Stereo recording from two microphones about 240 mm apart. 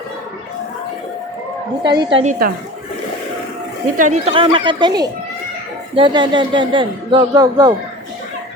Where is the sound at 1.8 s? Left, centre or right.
Centre.